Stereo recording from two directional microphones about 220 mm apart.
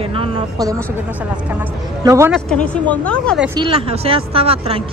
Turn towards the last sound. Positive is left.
turn(degrees=-25)  # may be behind; listen again after turning